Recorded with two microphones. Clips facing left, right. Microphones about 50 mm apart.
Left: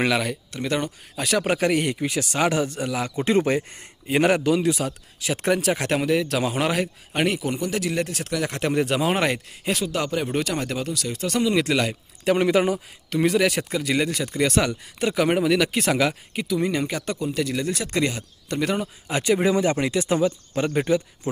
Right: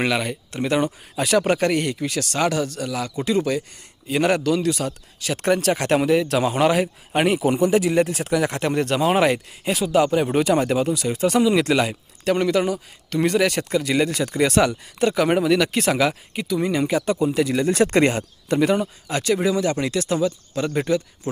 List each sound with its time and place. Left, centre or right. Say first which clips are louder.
0.0 s speech: even; centre
3.2 s a man's voice: left 1 dB; left
4.3 s speech: right 1 dB; centre
11.4 s speech: right 3 dB; centre
12.2 s speech: even; centre
13.1 s speech: right 1 dB; centre
17.7 s speech: right 7 dB; right
18.6 s speech: right 5 dB; centre
19.0 s speech: left 2 dB; centre
20.7 s speech: even; centre